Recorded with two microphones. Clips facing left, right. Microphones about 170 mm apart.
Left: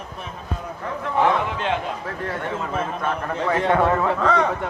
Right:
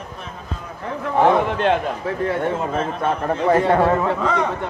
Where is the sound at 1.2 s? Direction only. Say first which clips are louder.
Right 5 dB; 50° right (ahead or behind).